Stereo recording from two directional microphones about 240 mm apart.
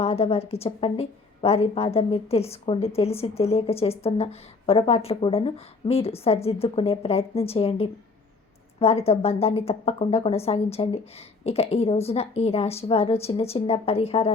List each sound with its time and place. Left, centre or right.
0.0 s a woman's voice: left